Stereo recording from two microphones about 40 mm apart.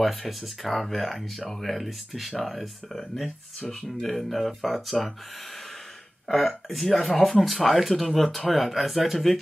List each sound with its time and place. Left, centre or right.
0.0 s speech: centre
6.2 s speech: centre